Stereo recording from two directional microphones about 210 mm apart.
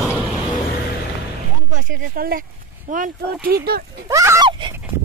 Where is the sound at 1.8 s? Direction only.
40° right (ahead or behind).